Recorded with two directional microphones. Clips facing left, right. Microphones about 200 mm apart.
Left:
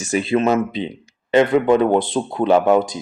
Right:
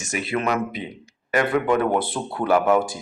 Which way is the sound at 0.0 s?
30° left (ahead or behind).